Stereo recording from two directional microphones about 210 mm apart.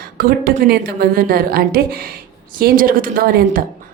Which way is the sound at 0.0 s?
45° right (ahead or behind).